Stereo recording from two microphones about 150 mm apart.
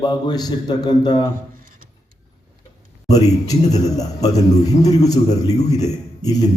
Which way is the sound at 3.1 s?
25° left (ahead or behind).